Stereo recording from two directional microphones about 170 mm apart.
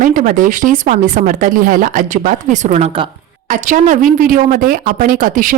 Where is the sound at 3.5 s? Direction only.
50° right (ahead or behind).